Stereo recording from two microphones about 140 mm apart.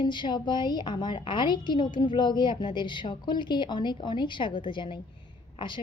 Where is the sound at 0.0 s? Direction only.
35° left (ahead or behind).